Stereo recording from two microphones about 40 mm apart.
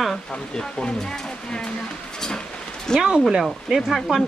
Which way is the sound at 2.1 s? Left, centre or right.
Centre.